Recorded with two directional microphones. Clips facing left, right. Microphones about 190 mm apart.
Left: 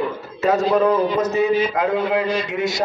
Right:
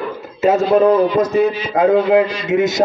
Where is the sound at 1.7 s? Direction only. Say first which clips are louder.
Right 7 dB; 50° right (ahead or behind).